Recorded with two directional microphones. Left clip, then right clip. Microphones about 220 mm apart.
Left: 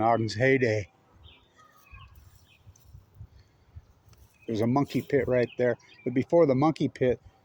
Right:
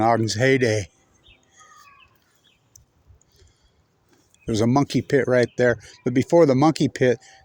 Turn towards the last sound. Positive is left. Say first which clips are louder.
# right 6 dB
turn(degrees=-55)  # may be behind; listen again after turning